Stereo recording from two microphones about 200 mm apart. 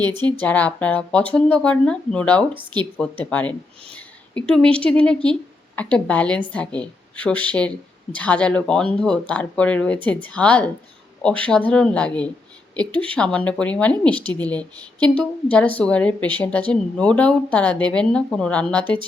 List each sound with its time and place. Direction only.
0.0 s speech: 20° right (ahead or behind)
0.3 s speech: 5° left (ahead or behind)
2.5 s speech: 25° right (ahead or behind)
3.0 s speech: 5° left (ahead or behind)